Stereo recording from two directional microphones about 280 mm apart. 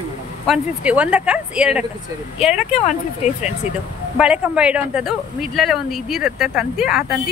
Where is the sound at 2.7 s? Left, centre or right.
Left.